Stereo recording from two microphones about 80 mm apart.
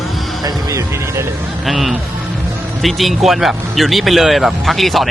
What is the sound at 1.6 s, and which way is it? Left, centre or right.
Speech, centre.